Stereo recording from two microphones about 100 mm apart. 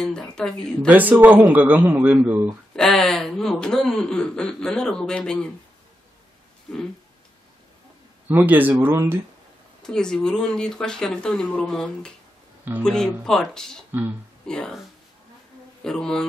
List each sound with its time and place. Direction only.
0.0 s speech: 5° left (ahead or behind)
0.8 s a man's voice: 15° right (ahead or behind)
2.7 s speech: 5° left (ahead or behind)
8.3 s speech: 20° right (ahead or behind)
9.8 s speech: 5° left (ahead or behind)
15.8 s speech: 5° left (ahead or behind)